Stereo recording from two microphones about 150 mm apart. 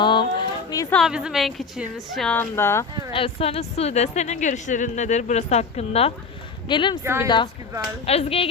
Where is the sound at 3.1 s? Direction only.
40° left (ahead or behind).